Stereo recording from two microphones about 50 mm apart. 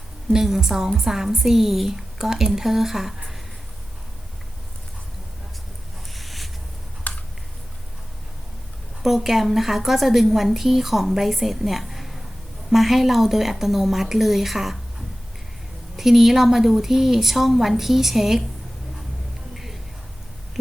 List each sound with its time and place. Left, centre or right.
0.3 s a woman's voice: centre
6.1 s a sound: centre
7.1 s computer keyboard: left
9.0 s a woman's voice: centre
16.0 s a woman's voice: centre